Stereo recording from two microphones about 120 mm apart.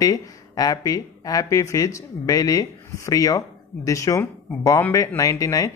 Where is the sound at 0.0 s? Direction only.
30° left (ahead or behind).